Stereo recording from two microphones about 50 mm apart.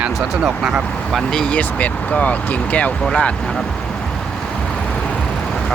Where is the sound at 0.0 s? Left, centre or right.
Right.